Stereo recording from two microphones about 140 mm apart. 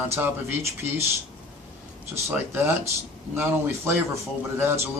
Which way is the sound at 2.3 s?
20° right (ahead or behind).